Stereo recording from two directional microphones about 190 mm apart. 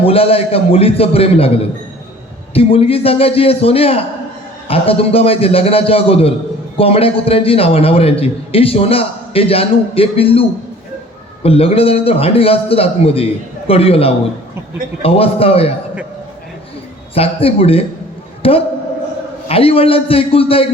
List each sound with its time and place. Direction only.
0.0 s a man's voice: 30° left (ahead or behind)
2.5 s a man's voice: 30° left (ahead or behind)
11.4 s a man's voice: 30° left (ahead or behind)
17.2 s a man's voice: 30° left (ahead or behind)